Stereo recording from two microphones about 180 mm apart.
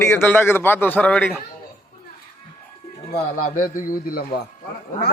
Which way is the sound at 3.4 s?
50° left (ahead or behind).